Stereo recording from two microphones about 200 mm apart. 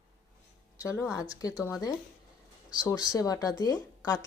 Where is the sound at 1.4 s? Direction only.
20° left (ahead or behind).